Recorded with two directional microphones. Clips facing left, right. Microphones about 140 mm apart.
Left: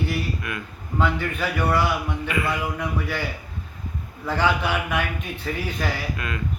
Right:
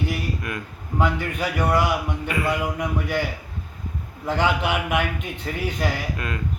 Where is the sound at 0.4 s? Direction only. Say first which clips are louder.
Right 1 dB; 40° right (ahead or behind).